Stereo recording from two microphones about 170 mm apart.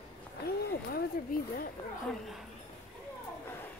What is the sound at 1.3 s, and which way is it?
Speech, 60° left (ahead or behind).